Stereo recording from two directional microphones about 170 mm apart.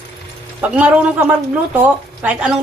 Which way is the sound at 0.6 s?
10° right (ahead or behind).